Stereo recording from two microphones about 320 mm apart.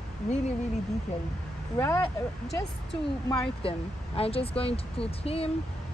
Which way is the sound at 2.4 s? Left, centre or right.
Centre.